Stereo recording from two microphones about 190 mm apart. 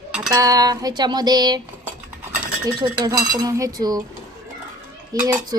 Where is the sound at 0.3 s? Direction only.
15° right (ahead or behind).